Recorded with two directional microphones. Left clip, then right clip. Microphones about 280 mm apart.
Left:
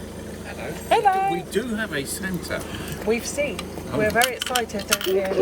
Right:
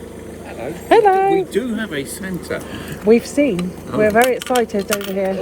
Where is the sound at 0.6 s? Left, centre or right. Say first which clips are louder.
Right 7 dB; right.